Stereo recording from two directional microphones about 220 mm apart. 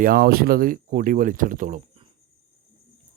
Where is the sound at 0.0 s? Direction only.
40° right (ahead or behind).